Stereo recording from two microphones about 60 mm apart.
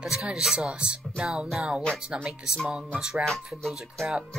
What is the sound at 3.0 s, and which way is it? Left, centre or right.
Speech, centre.